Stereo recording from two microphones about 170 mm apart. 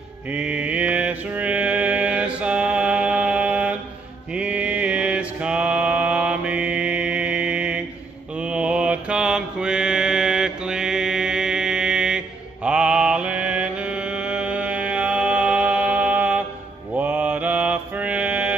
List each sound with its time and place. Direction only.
0.3 s mantra: 5° right (ahead or behind)